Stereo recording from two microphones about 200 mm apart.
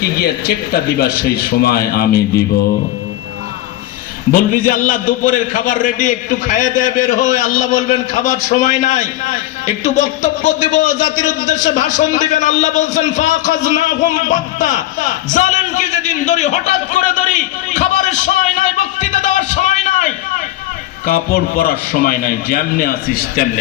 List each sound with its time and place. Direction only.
0.0 s a man's voice: 50° left (ahead or behind)
4.3 s a man's voice: 45° left (ahead or behind)